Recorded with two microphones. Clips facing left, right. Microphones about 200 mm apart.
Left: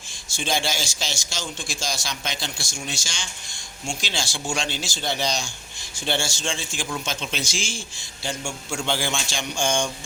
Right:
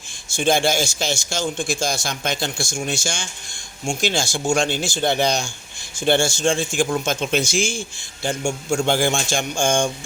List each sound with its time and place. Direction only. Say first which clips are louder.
0.3 s speech: right 8 dB; 50° right (ahead or behind)